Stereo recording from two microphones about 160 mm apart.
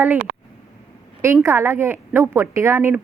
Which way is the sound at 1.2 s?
15° right (ahead or behind).